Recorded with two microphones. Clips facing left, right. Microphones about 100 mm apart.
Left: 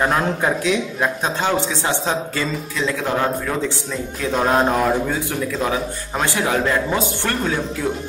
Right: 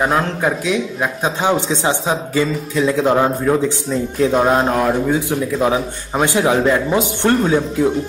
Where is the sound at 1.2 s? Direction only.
15° right (ahead or behind).